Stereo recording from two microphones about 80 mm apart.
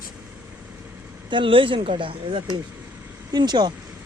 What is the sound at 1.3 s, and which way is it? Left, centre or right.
Speech, right.